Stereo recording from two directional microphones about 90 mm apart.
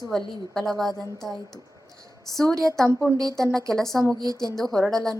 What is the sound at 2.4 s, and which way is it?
A woman's voice, 5° left (ahead or behind).